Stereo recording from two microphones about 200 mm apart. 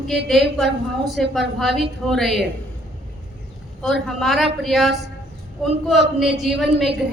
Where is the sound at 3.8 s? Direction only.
Centre (ahead or behind).